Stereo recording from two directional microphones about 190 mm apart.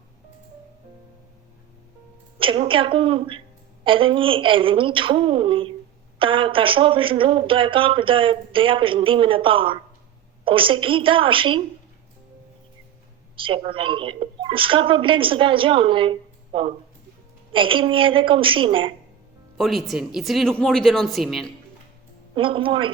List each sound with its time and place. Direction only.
2.4 s a woman's voice: 25° right (ahead or behind)
13.3 s a woman's voice: 25° right (ahead or behind)
19.5 s speech: centre (ahead or behind)
22.4 s a woman's voice: 25° right (ahead or behind)